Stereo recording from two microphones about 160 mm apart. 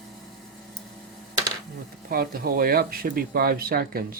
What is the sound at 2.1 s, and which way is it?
Speech, 65° right (ahead or behind).